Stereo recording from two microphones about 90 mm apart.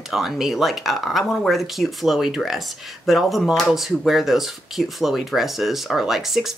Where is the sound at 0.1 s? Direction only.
5° right (ahead or behind).